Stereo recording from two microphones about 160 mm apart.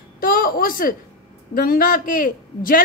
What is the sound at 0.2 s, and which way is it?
A woman's voice, 65° left (ahead or behind).